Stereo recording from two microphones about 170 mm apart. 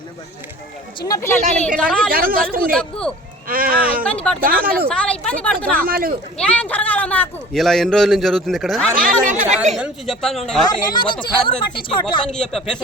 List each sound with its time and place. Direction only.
1.0 s speech: 20° left (ahead or behind)
1.8 s a man's voice: 5° left (ahead or behind)
2.0 s speech: 60° right (ahead or behind)
2.7 s a man's voice: 5° left (ahead or behind)
3.4 s speech: 60° right (ahead or behind)
4.0 s a woman's voice: 5° left (ahead or behind)
4.4 s speech: 55° right (ahead or behind)
4.9 s a woman's voice: 5° left (ahead or behind)
5.8 s speech: 60° right (ahead or behind)
6.3 s a man's voice: 5° left (ahead or behind)
9.0 s speech: 50° right (ahead or behind)
9.7 s a man's voice: centre (ahead or behind)
10.8 s speech: 25° left (ahead or behind)
12.3 s a man's voice: 5° left (ahead or behind)